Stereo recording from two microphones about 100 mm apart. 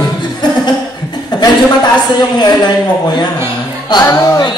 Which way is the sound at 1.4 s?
45° left (ahead or behind).